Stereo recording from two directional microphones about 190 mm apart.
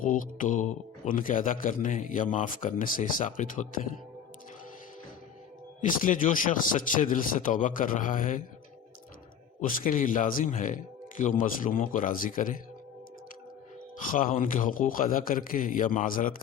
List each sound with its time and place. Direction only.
0.0 s speech: 45° left (ahead or behind)
5.8 s speech: 45° left (ahead or behind)
9.6 s speech: 45° left (ahead or behind)
14.1 s speech: 45° left (ahead or behind)